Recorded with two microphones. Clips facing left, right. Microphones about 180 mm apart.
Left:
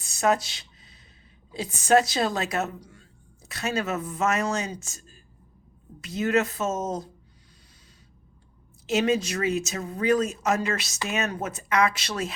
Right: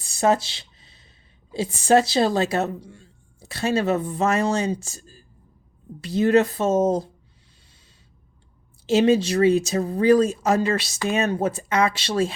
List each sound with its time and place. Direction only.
0.0 s a sound: 30° right (ahead or behind)
1.5 s speech: 30° right (ahead or behind)
8.9 s speech: 30° right (ahead or behind)